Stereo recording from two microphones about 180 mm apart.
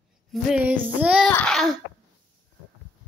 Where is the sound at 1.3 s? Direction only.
5° left (ahead or behind).